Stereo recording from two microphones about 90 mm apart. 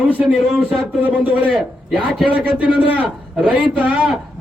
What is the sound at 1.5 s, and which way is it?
A man's voice, 5° right (ahead or behind).